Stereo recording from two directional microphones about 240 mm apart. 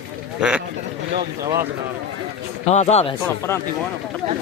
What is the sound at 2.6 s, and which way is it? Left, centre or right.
Speech, left.